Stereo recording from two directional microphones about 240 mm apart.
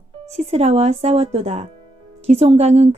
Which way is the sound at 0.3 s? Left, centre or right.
Right.